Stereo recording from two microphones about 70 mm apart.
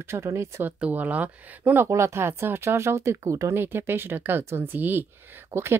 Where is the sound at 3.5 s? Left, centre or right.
Right.